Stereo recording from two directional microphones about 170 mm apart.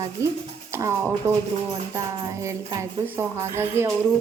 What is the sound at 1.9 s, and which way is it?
Speech, 20° right (ahead or behind).